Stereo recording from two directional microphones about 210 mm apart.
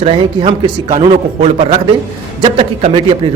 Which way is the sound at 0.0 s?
25° right (ahead or behind).